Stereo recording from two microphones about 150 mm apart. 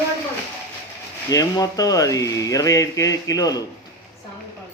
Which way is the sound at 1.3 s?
25° left (ahead or behind).